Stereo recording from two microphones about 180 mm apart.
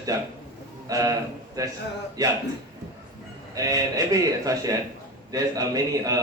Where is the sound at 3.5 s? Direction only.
20° right (ahead or behind).